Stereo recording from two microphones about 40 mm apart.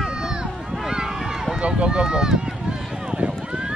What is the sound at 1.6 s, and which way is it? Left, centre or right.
Run, right.